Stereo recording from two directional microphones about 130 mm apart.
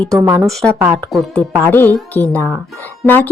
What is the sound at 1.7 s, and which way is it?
Speech, 15° left (ahead or behind).